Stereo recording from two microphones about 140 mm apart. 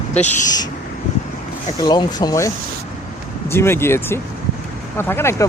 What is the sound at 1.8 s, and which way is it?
Speech, 30° left (ahead or behind).